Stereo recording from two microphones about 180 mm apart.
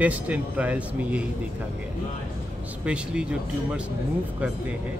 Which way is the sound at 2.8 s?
5° right (ahead or behind).